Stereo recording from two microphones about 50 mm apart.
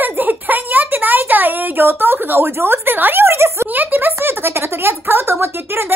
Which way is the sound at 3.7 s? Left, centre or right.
Right.